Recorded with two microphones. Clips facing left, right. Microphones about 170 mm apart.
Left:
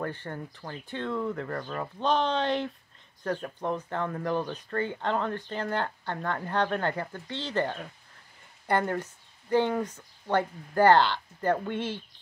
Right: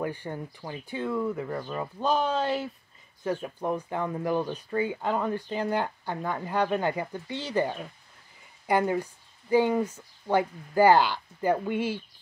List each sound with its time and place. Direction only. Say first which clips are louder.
0.0 s speech: right 2 dB; 10° right (ahead or behind)